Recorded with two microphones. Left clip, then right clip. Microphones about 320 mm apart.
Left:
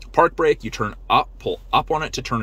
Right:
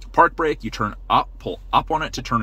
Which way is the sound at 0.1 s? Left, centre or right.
Centre.